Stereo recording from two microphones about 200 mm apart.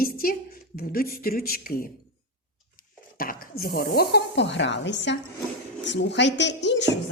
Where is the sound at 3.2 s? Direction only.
45° left (ahead or behind); by 6.9 s 60° left (ahead or behind).